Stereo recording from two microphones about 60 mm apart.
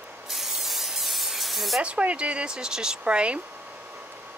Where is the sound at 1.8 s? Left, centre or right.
Centre.